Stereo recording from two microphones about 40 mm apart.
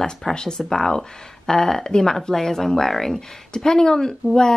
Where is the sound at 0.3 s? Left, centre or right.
Centre.